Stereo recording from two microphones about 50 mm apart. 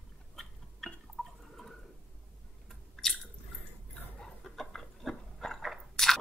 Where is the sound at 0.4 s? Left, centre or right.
Centre.